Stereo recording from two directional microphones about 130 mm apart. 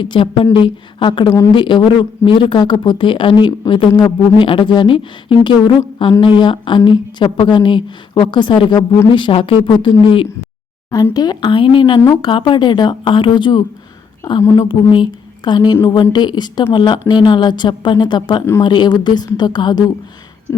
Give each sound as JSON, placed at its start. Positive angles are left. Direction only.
{"t": 0.0, "sound": "speech", "side_deg": 40}
{"t": 11.1, "sound": "speech", "side_deg": 30}
{"t": 14.4, "sound": "speech", "side_deg": 25}
{"t": 14.7, "sound": "speech", "side_deg": 40}
{"t": 20.5, "sound": "a sound", "side_deg": 20}